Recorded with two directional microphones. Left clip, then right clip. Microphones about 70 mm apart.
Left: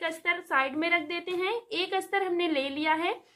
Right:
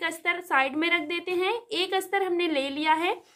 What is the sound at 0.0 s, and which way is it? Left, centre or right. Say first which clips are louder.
A woman's voice: right 2 dB; right.